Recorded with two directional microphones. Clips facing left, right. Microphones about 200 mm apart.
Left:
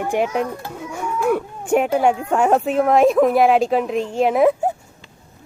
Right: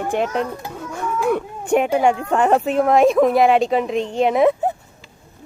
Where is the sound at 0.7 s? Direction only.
10° left (ahead or behind).